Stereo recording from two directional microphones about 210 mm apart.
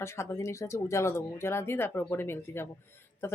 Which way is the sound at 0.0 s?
10° left (ahead or behind).